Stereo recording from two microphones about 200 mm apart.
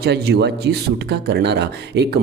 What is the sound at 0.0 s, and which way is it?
Speech, 55° right (ahead or behind).